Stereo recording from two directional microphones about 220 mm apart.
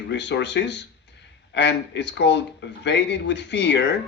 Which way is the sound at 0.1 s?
50° left (ahead or behind).